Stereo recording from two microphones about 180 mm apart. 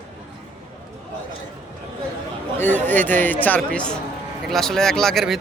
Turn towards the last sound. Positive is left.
turn(degrees=0)  # may be behind; listen again after turning